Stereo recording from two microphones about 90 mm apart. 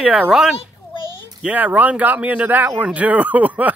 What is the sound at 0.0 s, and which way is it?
Speech, 10° right (ahead or behind).